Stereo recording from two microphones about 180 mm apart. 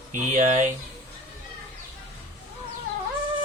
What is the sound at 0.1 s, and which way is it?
Speech, 45° right (ahead or behind).